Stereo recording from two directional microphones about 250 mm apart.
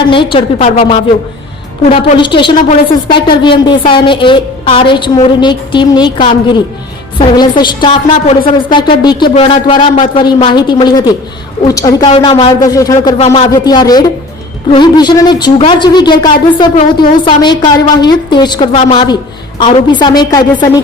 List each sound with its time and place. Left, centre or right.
0.0 s a woman's voice: centre
13.1 s a woman's voice: left